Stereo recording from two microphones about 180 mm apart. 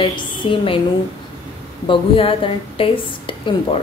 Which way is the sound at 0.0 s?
25° left (ahead or behind).